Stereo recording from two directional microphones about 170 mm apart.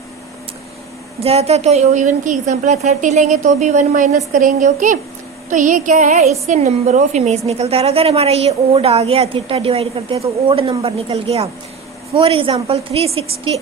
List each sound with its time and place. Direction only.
1.2 s a woman's voice: 35° right (ahead or behind)